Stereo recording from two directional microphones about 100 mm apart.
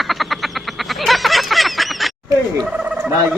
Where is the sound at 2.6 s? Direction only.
10° right (ahead or behind).